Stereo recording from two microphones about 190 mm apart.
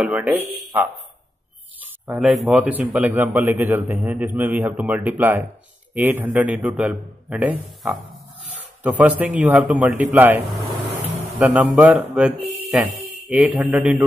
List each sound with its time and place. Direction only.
0.0 s speech: 5° right (ahead or behind)
0.4 s speech: 30° right (ahead or behind)
1.8 s a man's voice: centre (ahead or behind)